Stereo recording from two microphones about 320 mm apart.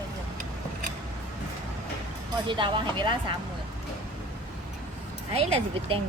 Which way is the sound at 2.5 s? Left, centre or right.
Centre.